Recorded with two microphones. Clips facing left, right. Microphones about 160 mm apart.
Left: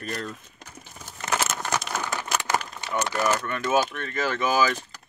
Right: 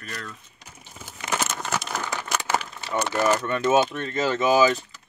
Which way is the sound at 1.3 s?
5° left (ahead or behind).